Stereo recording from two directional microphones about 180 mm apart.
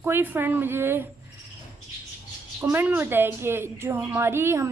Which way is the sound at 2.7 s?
10° right (ahead or behind).